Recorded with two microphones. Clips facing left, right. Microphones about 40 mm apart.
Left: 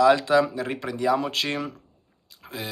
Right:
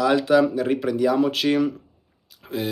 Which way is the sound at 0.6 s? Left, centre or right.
Left.